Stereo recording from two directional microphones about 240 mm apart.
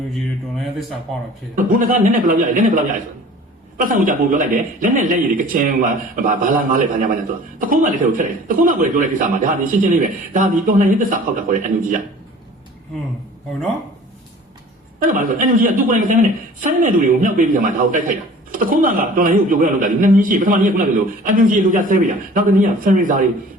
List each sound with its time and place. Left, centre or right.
1.1 s speech: centre
1.5 s a woman's voice: right
14.9 s a woman's voice: right